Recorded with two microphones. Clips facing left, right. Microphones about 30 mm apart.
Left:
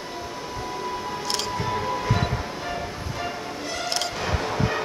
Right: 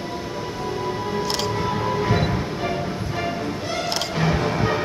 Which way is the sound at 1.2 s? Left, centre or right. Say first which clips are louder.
Right 2 dB; centre.